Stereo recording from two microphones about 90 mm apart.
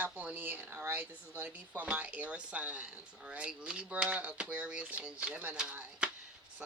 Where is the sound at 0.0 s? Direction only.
15° right (ahead or behind).